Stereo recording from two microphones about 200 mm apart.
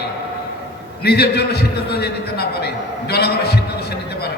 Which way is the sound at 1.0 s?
55° left (ahead or behind).